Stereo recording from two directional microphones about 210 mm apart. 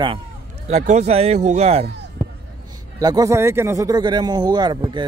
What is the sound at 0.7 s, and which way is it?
Speech, 35° right (ahead or behind).